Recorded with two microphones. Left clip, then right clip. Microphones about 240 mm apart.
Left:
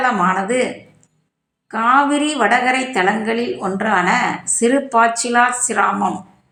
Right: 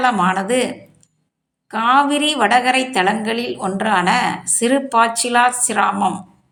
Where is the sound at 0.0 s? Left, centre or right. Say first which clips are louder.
Even; right.